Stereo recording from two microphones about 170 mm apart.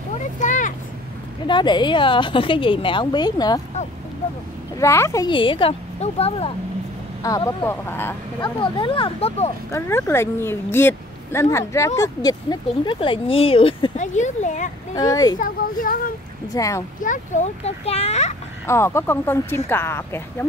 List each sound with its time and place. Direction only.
0.1 s vehicle: 45° left (ahead or behind)
1.5 s speech: 25° left (ahead or behind)
4.7 s speech: 15° left (ahead or behind); by 6.5 s 35° left (ahead or behind)
7.2 s a woman's voice: 20° left (ahead or behind)
8.4 s speech: 30° left (ahead or behind)
9.7 s a woman's voice: 15° left (ahead or behind); by 13.9 s 30° left (ahead or behind)
13.9 s speech: 45° left (ahead or behind)
15.0 s speech: 20° left (ahead or behind)
15.3 s speech: 55° left (ahead or behind)
16.5 s speech: 20° left (ahead or behind)
17.0 s speech: 50° left (ahead or behind)
18.7 s a woman's voice: 15° left (ahead or behind)